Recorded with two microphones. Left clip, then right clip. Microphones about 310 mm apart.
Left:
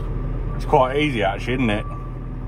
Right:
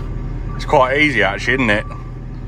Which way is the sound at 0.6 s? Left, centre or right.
Right.